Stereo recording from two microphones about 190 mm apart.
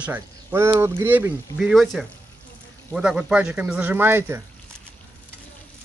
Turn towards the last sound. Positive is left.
turn(degrees=-10)  # may be behind; listen again after turning